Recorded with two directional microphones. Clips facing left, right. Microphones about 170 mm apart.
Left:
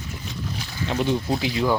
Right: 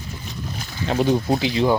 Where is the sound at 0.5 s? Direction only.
40° right (ahead or behind).